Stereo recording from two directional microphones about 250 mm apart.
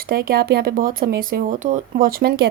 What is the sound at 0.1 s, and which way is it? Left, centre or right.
A woman's voice, right.